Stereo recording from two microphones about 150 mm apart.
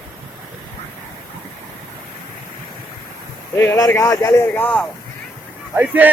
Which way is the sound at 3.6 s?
20° left (ahead or behind).